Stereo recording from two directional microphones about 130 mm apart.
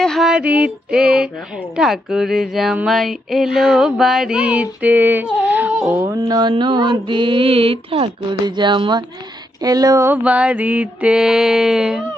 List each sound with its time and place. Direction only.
0.0 s music: centre (ahead or behind)
1.7 s mantra: 5° right (ahead or behind)
2.7 s a sound: centre (ahead or behind)
6.2 s mantra: 35° right (ahead or behind)
9.6 s speech: 30° right (ahead or behind)
10.2 s mantra: 10° right (ahead or behind)